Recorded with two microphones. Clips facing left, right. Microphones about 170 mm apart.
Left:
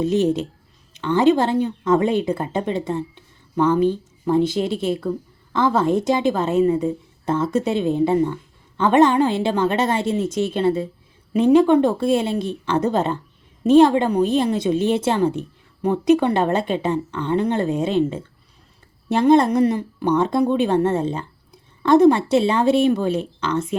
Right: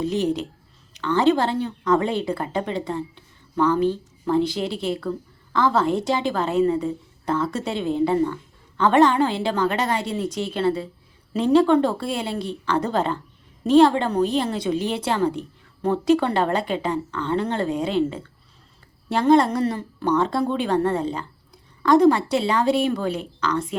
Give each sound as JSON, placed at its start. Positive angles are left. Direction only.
{"t": 0.0, "sound": "a woman's voice", "side_deg": 20}